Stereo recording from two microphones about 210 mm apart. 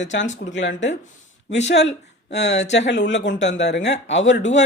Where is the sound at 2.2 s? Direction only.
55° left (ahead or behind).